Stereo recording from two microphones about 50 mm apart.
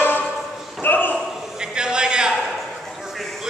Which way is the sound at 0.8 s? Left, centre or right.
Left.